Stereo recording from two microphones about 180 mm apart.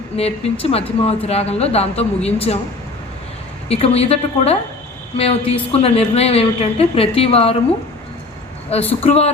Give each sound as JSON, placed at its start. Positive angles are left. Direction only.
{"t": 0.2, "sound": "a woman's voice", "side_deg": 30}
{"t": 3.7, "sound": "a woman's voice", "side_deg": 35}
{"t": 8.9, "sound": "a woman's voice", "side_deg": 35}